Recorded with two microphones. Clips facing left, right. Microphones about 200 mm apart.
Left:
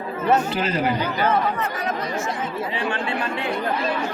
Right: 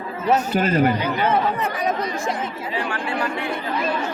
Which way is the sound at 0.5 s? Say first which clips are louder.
Right 5 dB; 50° right (ahead or behind).